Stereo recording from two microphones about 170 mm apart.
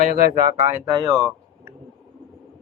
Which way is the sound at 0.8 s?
20° right (ahead or behind).